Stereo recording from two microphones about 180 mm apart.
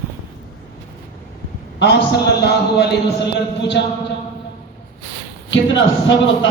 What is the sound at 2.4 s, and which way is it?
Music, 65° left (ahead or behind).